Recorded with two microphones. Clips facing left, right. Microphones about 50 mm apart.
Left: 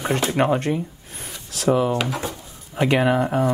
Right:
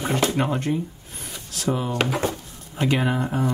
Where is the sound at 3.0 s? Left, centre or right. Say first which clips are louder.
Left 5 dB; left.